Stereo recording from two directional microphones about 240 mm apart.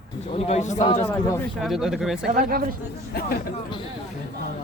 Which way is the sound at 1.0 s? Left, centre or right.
Centre.